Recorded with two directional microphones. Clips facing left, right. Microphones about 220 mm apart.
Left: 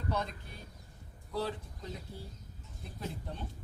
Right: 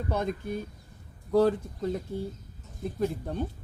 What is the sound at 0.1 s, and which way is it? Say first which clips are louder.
Speech: right 7 dB; 50° right (ahead or behind).